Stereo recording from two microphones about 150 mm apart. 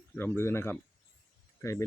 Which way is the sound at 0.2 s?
15° left (ahead or behind).